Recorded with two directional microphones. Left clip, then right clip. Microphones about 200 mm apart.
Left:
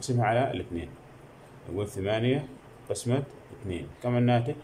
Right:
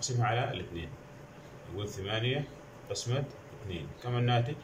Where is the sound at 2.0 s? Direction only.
30° left (ahead or behind).